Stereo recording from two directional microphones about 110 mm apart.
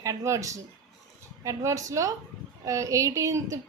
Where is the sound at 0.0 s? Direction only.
30° right (ahead or behind).